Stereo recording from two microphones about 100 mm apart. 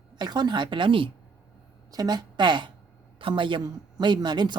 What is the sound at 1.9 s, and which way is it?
A woman's voice, 40° right (ahead or behind).